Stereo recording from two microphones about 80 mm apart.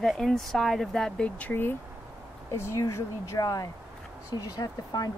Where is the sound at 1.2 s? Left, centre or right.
Centre.